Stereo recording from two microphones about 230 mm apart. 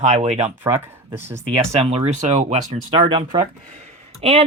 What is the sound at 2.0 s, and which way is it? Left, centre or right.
Speech, right.